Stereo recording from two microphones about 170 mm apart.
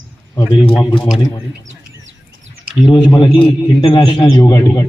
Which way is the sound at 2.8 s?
25° left (ahead or behind).